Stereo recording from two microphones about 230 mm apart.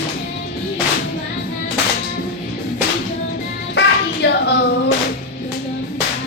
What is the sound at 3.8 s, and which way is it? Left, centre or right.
Hands, left.